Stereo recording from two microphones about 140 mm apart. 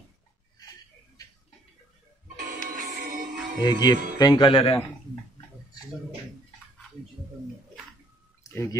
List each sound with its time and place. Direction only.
2.7 s music: 75° right (ahead or behind)
3.6 s speech: 30° left (ahead or behind)
8.5 s speech: 20° left (ahead or behind)